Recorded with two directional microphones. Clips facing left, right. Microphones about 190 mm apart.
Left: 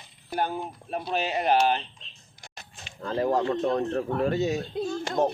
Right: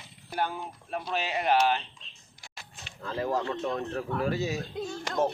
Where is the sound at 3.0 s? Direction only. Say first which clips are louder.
Left 5 dB; 25° left (ahead or behind).